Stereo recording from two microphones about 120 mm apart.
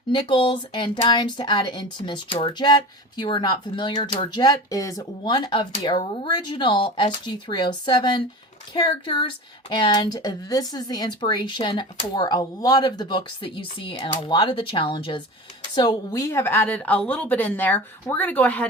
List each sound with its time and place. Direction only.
0.1 s speech: 40° left (ahead or behind); by 18.7 s 15° left (ahead or behind)